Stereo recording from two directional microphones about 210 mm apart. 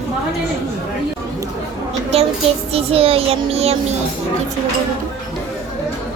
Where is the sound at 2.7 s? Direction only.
25° right (ahead or behind).